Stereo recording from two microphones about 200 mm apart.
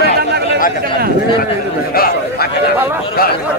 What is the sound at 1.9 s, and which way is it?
Speech, 50° left (ahead or behind).